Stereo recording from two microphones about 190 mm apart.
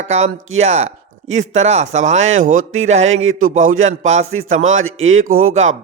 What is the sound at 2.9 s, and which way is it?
Speech, 35° right (ahead or behind).